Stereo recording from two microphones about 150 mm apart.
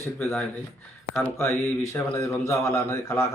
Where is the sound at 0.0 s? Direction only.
15° left (ahead or behind).